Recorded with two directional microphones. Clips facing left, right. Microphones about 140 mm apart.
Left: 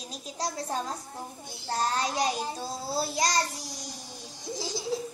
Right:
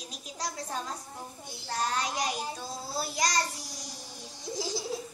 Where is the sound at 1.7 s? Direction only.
30° left (ahead or behind).